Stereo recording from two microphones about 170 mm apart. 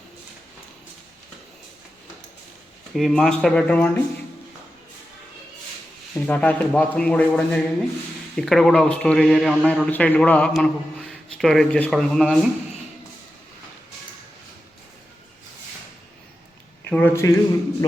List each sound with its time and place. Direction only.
2.9 s a man's voice: centre (ahead or behind)
6.1 s a man's voice: 10° left (ahead or behind)
16.9 s speech: 15° left (ahead or behind)